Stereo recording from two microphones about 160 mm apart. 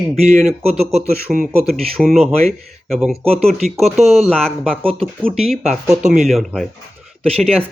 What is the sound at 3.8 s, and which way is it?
Speech, 40° right (ahead or behind).